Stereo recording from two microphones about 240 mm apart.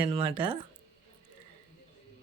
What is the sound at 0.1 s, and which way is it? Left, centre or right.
Speech, right.